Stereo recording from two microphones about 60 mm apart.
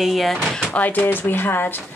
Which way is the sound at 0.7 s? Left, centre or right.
Left.